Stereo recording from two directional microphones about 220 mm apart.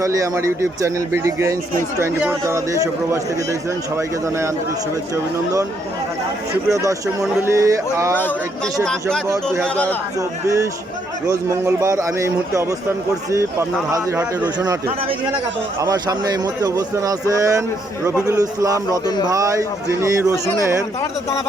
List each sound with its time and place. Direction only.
0.0 s speech: 15° right (ahead or behind)
6.7 s speech: 15° right (ahead or behind)
8.1 s speech: 5° left (ahead or behind)
10.2 s speech: 15° right (ahead or behind)
13.9 s speech: 15° right (ahead or behind)
20.3 s speech: 10° left (ahead or behind)